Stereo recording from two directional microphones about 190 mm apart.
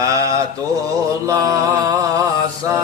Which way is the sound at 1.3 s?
15° right (ahead or behind).